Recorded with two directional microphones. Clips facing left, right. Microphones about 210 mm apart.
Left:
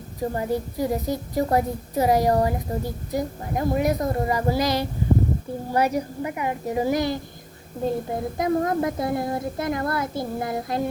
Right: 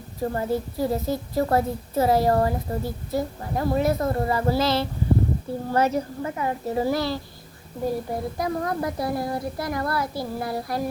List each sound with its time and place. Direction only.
0.2 s a woman's voice: 15° left (ahead or behind)